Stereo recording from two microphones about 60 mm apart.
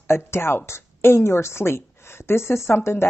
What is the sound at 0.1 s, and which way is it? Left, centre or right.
Speech, left.